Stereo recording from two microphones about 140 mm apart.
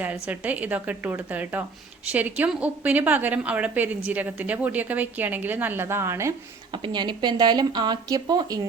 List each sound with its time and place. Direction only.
0.0 s a woman's voice: 10° right (ahead or behind)
6.7 s speech: 35° right (ahead or behind)